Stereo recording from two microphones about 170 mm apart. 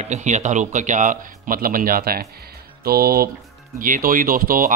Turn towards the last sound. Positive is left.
turn(degrees=-55)  # may be behind; listen again after turning